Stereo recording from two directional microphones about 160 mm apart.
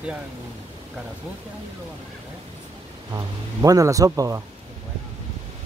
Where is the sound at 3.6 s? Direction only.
20° right (ahead or behind).